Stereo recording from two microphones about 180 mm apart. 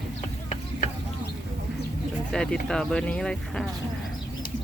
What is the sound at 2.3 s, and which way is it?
Speech, 5° left (ahead or behind).